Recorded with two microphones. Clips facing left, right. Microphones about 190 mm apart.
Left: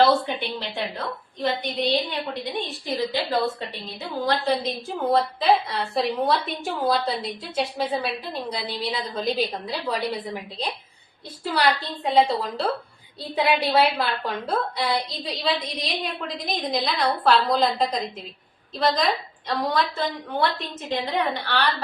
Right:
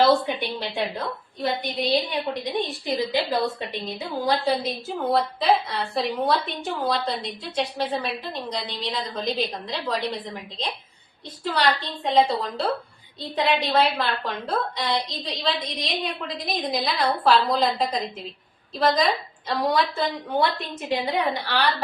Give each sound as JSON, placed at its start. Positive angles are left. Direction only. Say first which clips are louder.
{"t": 0.0, "sound": "a woman's voice", "louder": "even", "side_deg": -20}
{"t": 4.3, "sound": "a woman's voice", "louder": "even", "side_deg": -10}